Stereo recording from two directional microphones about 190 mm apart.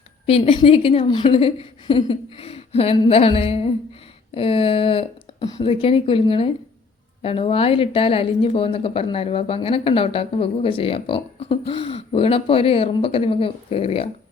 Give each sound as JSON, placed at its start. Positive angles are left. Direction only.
{"t": 0.3, "sound": "a woman's voice", "side_deg": 30}